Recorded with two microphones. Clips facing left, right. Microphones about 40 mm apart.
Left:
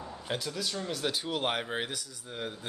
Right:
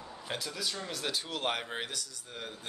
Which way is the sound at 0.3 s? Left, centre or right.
Centre.